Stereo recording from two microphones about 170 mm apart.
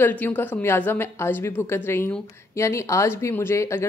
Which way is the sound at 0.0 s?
10° left (ahead or behind).